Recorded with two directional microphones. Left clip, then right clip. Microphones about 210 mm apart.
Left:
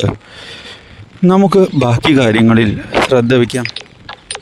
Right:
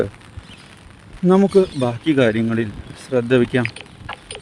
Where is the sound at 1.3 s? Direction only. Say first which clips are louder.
Left 5 dB; 50° left (ahead or behind).